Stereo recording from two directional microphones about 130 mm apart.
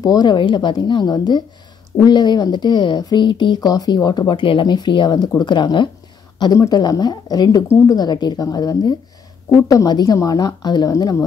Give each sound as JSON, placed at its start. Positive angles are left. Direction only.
{"t": 0.0, "sound": "speech", "side_deg": 30}